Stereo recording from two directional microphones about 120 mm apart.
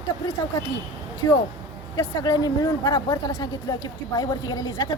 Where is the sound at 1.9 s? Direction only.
35° left (ahead or behind).